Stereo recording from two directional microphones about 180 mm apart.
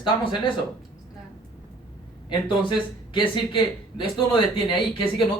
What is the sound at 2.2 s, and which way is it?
Speech, 25° left (ahead or behind).